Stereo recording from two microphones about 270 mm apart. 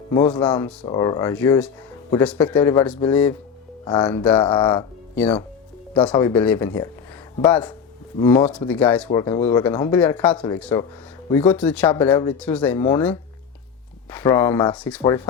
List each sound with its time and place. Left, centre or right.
0.1 s speech: centre
4.4 s speech: centre
5.1 s speech: centre